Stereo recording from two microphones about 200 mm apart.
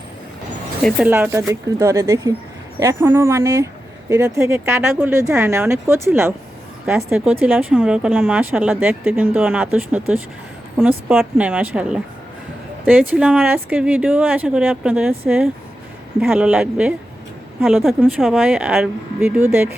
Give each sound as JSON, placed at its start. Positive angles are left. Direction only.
{"t": 0.8, "sound": "speech", "side_deg": 5}
{"t": 1.0, "sound": "a woman's voice", "side_deg": -10}
{"t": 16.2, "sound": "a woman's voice", "side_deg": -5}